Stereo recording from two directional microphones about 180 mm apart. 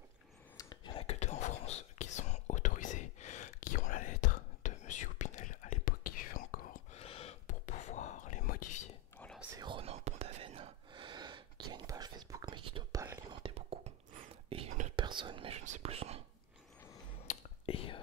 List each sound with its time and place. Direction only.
0.6 s whispering: 25° left (ahead or behind); by 7.0 s 50° left (ahead or behind)
7.0 s whispering: 35° left (ahead or behind)
9.6 s whispering: 30° right (ahead or behind)
17.3 s whispering: 30° left (ahead or behind)